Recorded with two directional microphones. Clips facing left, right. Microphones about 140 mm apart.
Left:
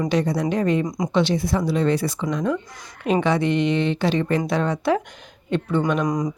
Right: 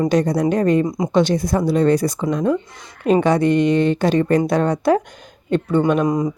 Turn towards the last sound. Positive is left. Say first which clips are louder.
# right 4 dB
turn(degrees=-25)  # may be behind; listen again after turning